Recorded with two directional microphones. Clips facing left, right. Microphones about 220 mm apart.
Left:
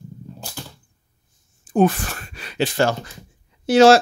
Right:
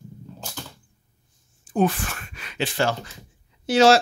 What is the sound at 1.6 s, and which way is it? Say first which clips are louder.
Speech: left 4 dB; 45° left (ahead or behind).